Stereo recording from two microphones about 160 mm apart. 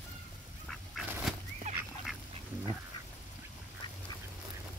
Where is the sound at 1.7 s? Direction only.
45° right (ahead or behind).